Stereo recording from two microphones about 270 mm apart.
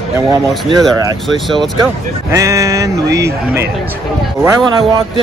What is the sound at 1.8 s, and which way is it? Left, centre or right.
Speech, centre.